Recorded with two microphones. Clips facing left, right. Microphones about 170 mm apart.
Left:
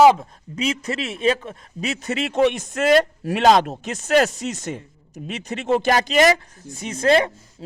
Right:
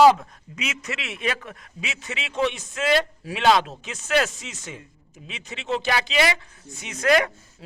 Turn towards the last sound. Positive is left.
turn(degrees=30)  # may be behind; listen again after turning